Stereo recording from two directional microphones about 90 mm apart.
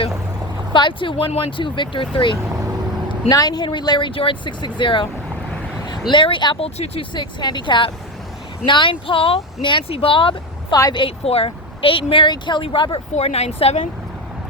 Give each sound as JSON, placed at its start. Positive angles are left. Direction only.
{"t": 0.7, "sound": "speech", "side_deg": 65}
{"t": 3.2, "sound": "speech", "side_deg": 45}
{"t": 6.1, "sound": "speech", "side_deg": 65}
{"t": 13.6, "sound": "speech", "side_deg": 90}